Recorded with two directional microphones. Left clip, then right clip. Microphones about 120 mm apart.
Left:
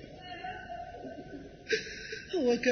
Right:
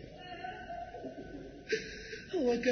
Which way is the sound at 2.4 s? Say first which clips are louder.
Left 3 dB; 15° left (ahead or behind).